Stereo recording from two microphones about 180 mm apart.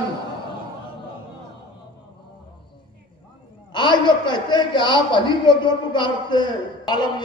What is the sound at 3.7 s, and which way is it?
A man's voice, 25° left (ahead or behind).